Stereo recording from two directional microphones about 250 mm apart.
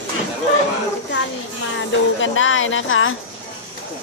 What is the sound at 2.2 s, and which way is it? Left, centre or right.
Speech, left.